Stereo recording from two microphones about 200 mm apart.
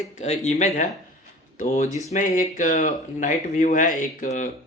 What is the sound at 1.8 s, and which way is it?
Speech, 15° right (ahead or behind).